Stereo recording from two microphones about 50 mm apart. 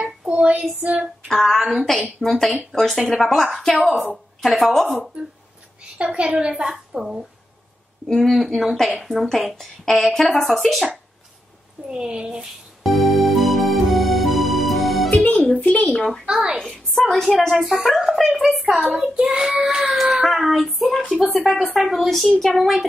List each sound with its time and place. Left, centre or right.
0.0 s child singing: right
0.8 s a woman's voice: right
1.3 s speech: centre
5.9 s a woman's voice: centre
8.1 s speech: centre
11.9 s a woman's voice: centre
12.4 s music: centre
15.0 s music: left
15.9 s speech: centre
16.3 s a woman's voice: centre
16.9 s speech: centre
19.3 s a woman's voice: centre
19.9 s speech: centre